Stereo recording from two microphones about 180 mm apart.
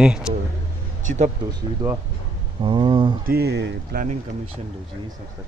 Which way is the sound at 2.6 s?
25° right (ahead or behind).